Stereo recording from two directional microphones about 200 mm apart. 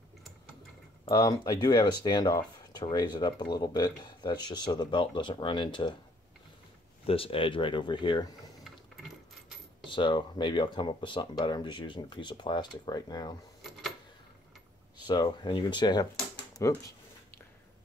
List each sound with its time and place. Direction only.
1.0 s speech: 20° left (ahead or behind)
7.1 s speech: 25° left (ahead or behind)
9.8 s speech: 25° left (ahead or behind)
13.6 s a sound: centre (ahead or behind)
15.0 s speech: 20° left (ahead or behind)